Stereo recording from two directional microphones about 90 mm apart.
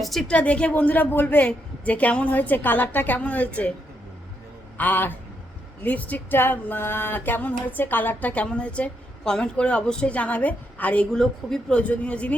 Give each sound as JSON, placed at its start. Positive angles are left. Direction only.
{"t": 0.0, "sound": "a woman's voice", "side_deg": 5}
{"t": 0.3, "sound": "a woman's voice", "side_deg": 15}
{"t": 4.8, "sound": "a woman's voice", "side_deg": 20}